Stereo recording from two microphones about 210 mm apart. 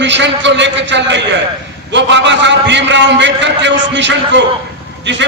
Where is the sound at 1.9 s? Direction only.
55° right (ahead or behind).